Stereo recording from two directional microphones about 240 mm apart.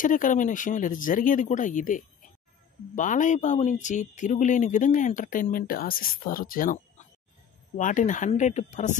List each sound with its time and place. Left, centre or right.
0.0 s speech: left